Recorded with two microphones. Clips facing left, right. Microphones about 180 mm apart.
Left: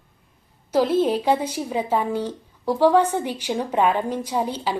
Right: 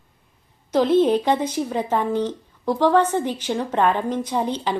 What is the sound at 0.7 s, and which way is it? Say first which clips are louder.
Speech: right 2 dB; 5° left (ahead or behind).